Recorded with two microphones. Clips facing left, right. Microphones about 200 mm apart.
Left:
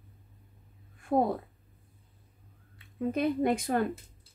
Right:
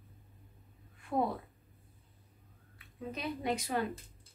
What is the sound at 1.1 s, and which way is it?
Speech, 45° left (ahead or behind).